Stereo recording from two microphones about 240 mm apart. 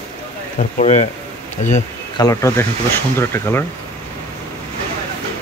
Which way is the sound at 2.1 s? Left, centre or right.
Centre.